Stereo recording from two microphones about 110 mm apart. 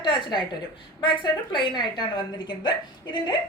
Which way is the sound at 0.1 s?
45° left (ahead or behind).